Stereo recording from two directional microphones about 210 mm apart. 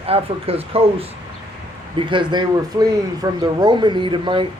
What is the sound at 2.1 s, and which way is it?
A man's voice, 20° right (ahead or behind).